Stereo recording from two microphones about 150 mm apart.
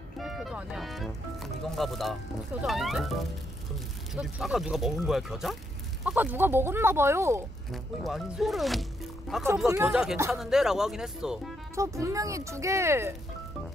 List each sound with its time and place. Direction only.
0.2 s speech: centre (ahead or behind); by 7.4 s 20° right (ahead or behind)
7.7 s speech: centre (ahead or behind)
11.7 s speech: 20° right (ahead or behind)